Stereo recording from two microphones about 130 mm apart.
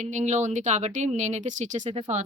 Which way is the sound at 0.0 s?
65° right (ahead or behind).